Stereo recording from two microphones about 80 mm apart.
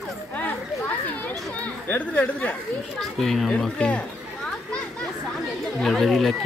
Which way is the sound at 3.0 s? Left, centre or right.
Centre.